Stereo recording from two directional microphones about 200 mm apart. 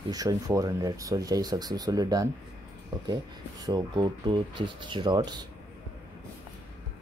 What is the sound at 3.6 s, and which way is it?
Speech, 20° right (ahead or behind).